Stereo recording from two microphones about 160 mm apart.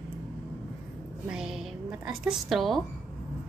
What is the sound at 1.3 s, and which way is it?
A woman's voice, 5° right (ahead or behind).